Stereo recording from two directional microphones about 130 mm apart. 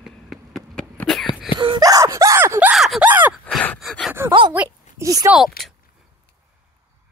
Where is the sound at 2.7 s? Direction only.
5° right (ahead or behind).